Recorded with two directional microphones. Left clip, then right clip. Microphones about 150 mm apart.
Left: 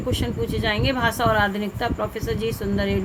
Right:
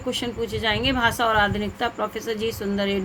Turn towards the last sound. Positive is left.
turn(degrees=-15)  # may be behind; listen again after turning